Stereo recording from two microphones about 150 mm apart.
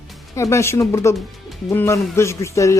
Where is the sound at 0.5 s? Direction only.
20° left (ahead or behind).